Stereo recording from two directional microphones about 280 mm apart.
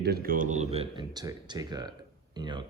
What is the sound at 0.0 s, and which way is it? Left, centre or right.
Speech, right.